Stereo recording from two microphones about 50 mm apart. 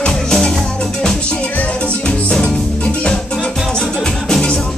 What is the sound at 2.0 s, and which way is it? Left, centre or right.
Music, centre.